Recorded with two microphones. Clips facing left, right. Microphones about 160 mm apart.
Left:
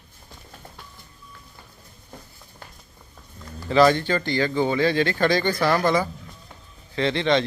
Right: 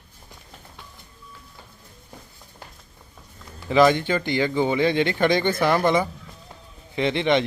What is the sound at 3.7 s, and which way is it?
A man's voice, 15° right (ahead or behind).